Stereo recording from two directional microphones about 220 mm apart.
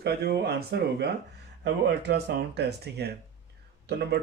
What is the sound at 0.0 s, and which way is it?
Speech, 45° right (ahead or behind).